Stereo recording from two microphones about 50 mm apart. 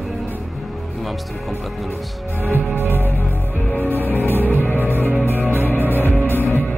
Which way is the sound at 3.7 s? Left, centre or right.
Left.